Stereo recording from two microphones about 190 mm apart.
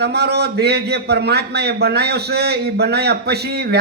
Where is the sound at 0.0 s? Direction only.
60° right (ahead or behind).